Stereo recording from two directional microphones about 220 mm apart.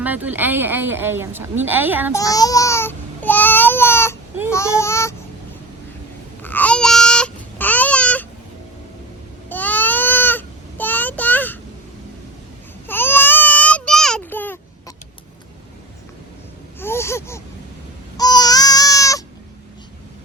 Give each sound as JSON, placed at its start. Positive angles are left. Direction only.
{"t": 0.0, "sound": "speech", "side_deg": -10}
{"t": 2.1, "sound": "babbling", "side_deg": 15}
{"t": 4.5, "sound": "speech", "side_deg": 15}
{"t": 6.4, "sound": "babbling", "side_deg": 10}
{"t": 9.5, "sound": "a sound", "side_deg": 5}
{"t": 12.9, "sound": "baby cry", "side_deg": 10}
{"t": 16.8, "sound": "a sound", "side_deg": 10}
{"t": 18.2, "sound": "baby cry", "side_deg": 20}